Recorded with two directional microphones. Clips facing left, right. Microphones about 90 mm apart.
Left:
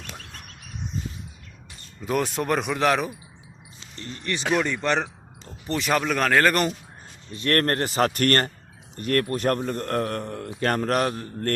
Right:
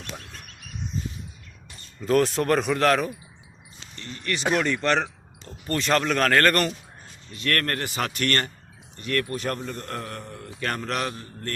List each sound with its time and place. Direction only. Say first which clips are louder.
2.0 s speech: right 4 dB; 5° left (ahead or behind)
3.9 s speech: even; 30° left (ahead or behind)
4.6 s speech: right 1 dB; 10° left (ahead or behind)
7.3 s a man's voice: left 4 dB; 30° left (ahead or behind); by 11.5 s 45° left (ahead or behind)